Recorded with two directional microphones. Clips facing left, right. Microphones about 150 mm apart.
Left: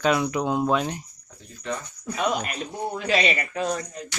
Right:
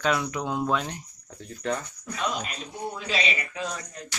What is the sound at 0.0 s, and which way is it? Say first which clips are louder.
Speech: left 4 dB; 15° left (ahead or behind).